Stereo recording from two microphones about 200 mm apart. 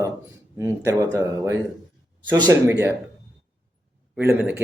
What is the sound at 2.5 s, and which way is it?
Speech, 15° right (ahead or behind).